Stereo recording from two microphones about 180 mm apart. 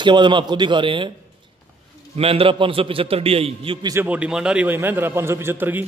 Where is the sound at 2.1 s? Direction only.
30° right (ahead or behind).